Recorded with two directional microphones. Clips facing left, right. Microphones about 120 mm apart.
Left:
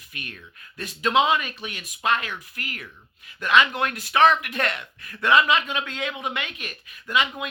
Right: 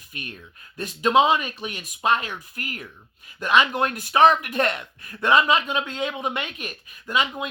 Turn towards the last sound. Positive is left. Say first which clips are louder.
# even
turn(degrees=-30)  # may be behind; listen again after turning